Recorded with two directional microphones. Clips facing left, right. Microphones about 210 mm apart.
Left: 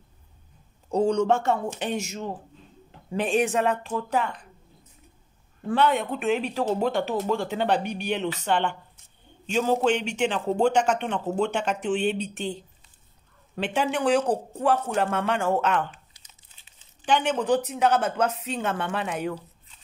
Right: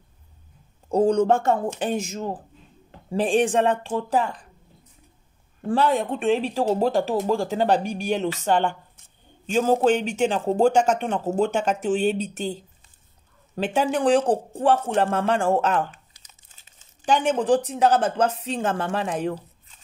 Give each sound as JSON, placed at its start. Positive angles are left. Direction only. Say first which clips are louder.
{"t": 0.9, "sound": "speech", "louder": "right 3 dB", "side_deg": -50}
{"t": 5.7, "sound": "speech", "louder": "right 2 dB", "side_deg": -35}
{"t": 16.4, "sound": "speech", "louder": "right 2 dB", "side_deg": -45}